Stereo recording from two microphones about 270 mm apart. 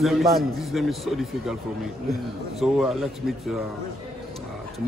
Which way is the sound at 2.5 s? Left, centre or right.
Centre.